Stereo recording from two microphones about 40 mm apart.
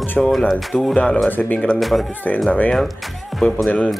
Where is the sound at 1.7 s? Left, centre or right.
Centre.